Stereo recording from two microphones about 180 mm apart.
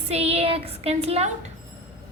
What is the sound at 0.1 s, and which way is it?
A woman's voice, 35° right (ahead or behind).